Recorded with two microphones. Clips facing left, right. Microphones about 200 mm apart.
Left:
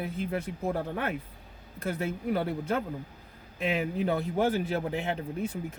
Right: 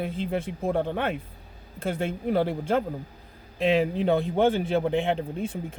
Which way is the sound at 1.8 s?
30° right (ahead or behind).